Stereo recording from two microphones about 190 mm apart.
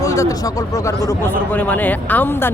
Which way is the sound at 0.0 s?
15° left (ahead or behind).